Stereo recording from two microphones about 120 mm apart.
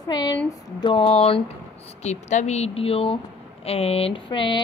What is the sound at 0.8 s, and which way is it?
Speech, 50° left (ahead or behind).